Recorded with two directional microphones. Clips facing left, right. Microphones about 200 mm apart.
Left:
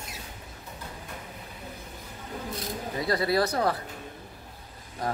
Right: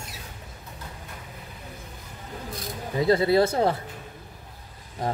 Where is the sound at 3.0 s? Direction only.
25° right (ahead or behind).